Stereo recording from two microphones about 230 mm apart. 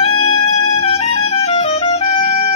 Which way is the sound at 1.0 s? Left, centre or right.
Left.